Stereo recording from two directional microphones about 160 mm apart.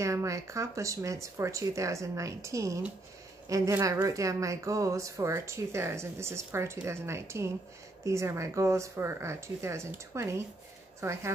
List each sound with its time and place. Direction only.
0.0 s a woman's voice: 20° right (ahead or behind)